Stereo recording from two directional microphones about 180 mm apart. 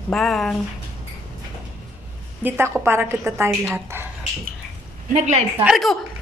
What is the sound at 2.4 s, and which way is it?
A woman's voice, 10° right (ahead or behind).